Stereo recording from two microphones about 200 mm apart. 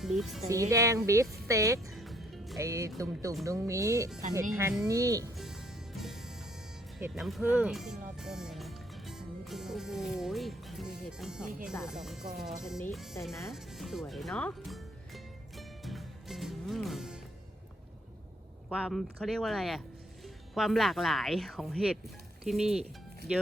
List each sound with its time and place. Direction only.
0.0 s speech: centre (ahead or behind)
0.4 s speech: 15° right (ahead or behind)
1.9 s music: centre (ahead or behind)
2.6 s speech: 15° right (ahead or behind)
5.4 s music: centre (ahead or behind)
7.2 s speech: centre (ahead or behind)
14.1 s music: centre (ahead or behind)
18.7 s speech: centre (ahead or behind)